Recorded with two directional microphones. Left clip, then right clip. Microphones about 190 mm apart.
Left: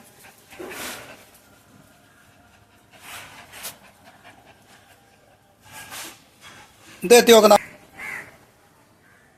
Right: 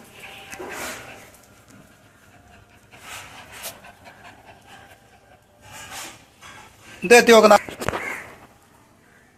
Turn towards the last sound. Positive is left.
turn(degrees=20)  # may be behind; listen again after turning